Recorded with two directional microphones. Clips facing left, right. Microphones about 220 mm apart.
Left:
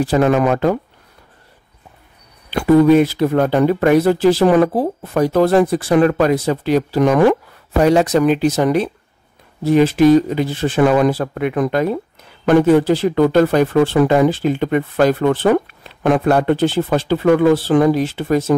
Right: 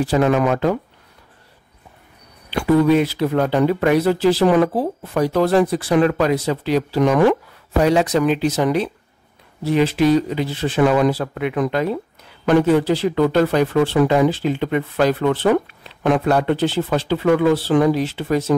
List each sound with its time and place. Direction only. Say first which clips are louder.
0.0 s speech: left 2 dB; 45° left (ahead or behind)
2.5 s speech: left 4 dB; 45° left (ahead or behind)